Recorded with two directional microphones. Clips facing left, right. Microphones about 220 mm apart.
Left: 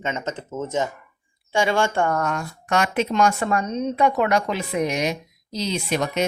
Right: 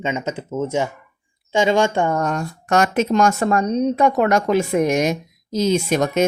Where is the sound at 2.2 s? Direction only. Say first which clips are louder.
Right 4 dB; 35° right (ahead or behind).